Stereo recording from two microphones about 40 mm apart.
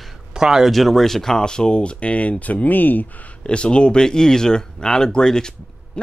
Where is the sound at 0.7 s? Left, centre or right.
Centre; by 3.0 s left.